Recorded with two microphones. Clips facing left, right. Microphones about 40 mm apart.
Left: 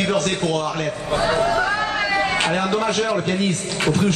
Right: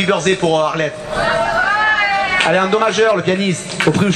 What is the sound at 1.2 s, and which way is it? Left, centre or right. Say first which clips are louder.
A man's voice: right 4 dB; right.